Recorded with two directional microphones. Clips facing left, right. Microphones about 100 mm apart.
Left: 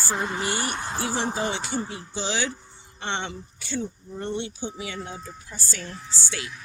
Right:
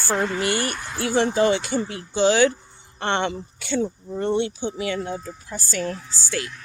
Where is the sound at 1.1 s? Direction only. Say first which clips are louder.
Right 11 dB; 65° right (ahead or behind).